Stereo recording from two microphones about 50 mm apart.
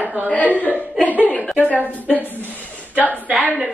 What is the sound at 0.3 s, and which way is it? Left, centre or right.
Speech, left.